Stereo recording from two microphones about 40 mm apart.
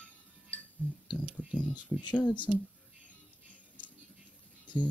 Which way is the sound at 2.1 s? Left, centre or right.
Left.